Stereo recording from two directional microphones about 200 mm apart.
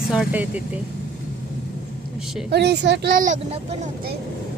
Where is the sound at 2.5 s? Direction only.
55° right (ahead or behind); by 3.8 s 35° right (ahead or behind).